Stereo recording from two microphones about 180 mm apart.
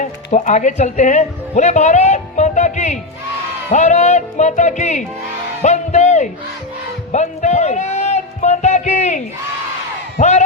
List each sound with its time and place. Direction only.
0.0 s a woman's voice: 40° left (ahead or behind)
7.1 s a sound: 40° left (ahead or behind)
10.2 s speech: 40° left (ahead or behind)